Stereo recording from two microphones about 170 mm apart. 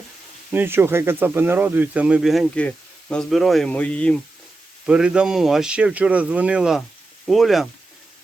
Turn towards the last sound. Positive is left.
turn(degrees=0)  # may be behind; listen again after turning